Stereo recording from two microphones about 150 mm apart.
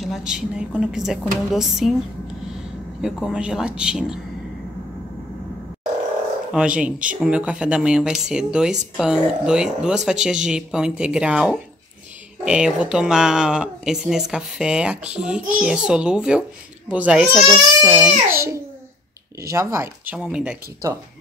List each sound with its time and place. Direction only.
0.0 s speech: 5° right (ahead or behind)
3.0 s speech: 5° right (ahead or behind)
6.5 s speech: 5° right (ahead or behind)
17.8 s speech: 10° right (ahead or behind)
20.2 s speech: 5° right (ahead or behind)